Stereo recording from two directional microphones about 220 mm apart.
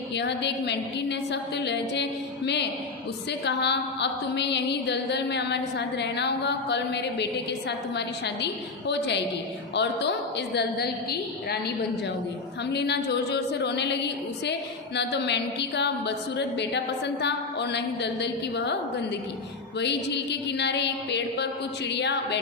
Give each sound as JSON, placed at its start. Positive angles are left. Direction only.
{"t": 0.1, "sound": "a woman's voice", "side_deg": 50}
{"t": 12.7, "sound": "a woman's voice", "side_deg": 50}
{"t": 19.8, "sound": "a woman's voice", "side_deg": 50}